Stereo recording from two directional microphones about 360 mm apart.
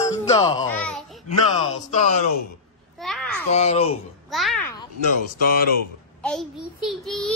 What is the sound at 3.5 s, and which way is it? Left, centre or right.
Speech, centre.